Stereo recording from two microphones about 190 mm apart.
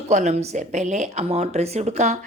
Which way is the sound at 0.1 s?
40° right (ahead or behind).